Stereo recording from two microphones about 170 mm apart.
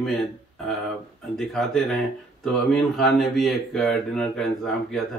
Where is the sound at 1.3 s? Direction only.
5° left (ahead or behind).